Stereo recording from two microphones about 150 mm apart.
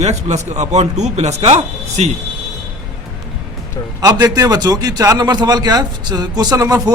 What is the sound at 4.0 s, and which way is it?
A man's voice, 25° right (ahead or behind).